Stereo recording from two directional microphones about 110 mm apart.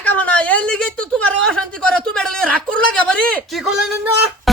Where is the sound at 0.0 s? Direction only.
15° left (ahead or behind); by 3.9 s 5° right (ahead or behind).